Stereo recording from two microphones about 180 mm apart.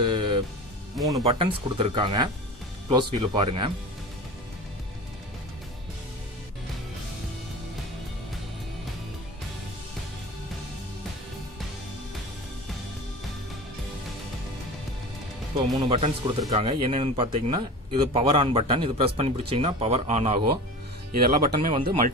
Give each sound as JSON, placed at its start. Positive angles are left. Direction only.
{"t": 0.0, "sound": "music", "side_deg": -25}
{"t": 1.2, "sound": "speech", "side_deg": -30}
{"t": 15.5, "sound": "speech", "side_deg": -30}
{"t": 21.2, "sound": "speech", "side_deg": -55}